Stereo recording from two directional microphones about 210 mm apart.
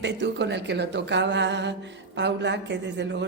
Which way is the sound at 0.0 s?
55° right (ahead or behind).